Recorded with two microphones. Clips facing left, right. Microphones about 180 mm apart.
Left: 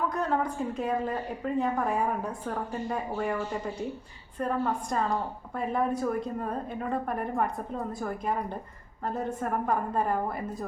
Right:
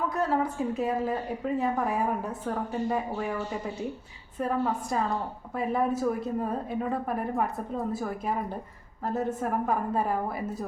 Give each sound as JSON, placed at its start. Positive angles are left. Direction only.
{"t": 0.1, "sound": "a woman's voice", "side_deg": -5}